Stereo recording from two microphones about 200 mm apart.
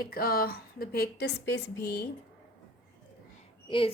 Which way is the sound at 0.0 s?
50° left (ahead or behind).